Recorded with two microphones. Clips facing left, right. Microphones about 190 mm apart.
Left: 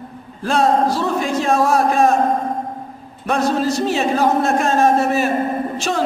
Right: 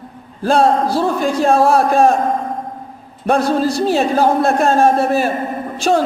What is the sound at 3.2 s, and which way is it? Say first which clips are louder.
A man's voice: right 3 dB; 35° right (ahead or behind).